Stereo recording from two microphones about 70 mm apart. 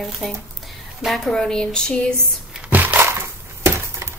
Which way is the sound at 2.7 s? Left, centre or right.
Right.